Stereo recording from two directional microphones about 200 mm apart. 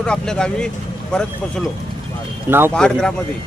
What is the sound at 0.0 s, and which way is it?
Speech, 5° left (ahead or behind).